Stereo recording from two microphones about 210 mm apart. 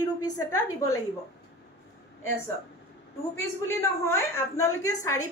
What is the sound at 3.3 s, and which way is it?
A woman's voice, 10° left (ahead or behind).